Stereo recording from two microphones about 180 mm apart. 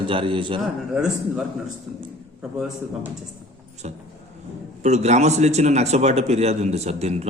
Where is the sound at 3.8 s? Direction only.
40° right (ahead or behind).